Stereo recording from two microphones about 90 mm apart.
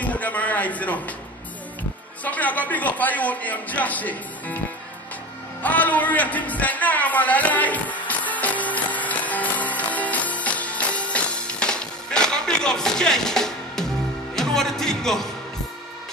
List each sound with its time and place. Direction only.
0.0 s a sound: 15° left (ahead or behind)
2.2 s a man's voice: 15° left (ahead or behind)
5.6 s music: 20° left (ahead or behind)